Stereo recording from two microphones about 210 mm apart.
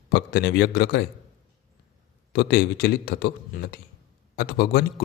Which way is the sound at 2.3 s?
50° left (ahead or behind).